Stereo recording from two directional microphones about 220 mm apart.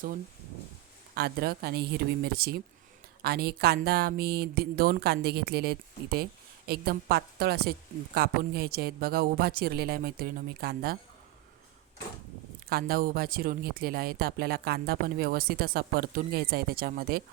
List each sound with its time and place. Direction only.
1.1 s speech: 45° right (ahead or behind)
12.6 s speech: 45° right (ahead or behind)